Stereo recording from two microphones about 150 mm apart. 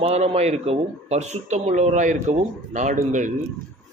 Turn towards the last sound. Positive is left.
turn(degrees=-55)  # may be behind; listen again after turning